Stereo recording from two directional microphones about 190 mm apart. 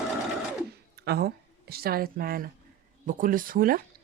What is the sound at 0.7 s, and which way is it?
A woman's voice, 55° right (ahead or behind).